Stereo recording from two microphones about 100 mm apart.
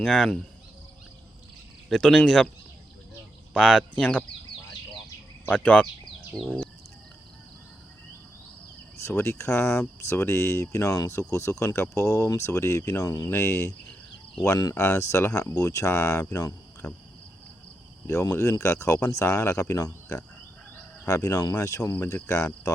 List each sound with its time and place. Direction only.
0.0 s speech: 5° left (ahead or behind)
1.9 s speech: 5° left (ahead or behind)
3.5 s speech: 5° left (ahead or behind)
5.5 s speech: 15° left (ahead or behind)
9.0 s speech: 25° left (ahead or behind)
18.0 s speech: 30° left (ahead or behind)